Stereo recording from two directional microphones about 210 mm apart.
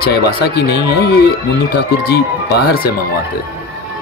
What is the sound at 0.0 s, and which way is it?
Speech, 50° left (ahead or behind).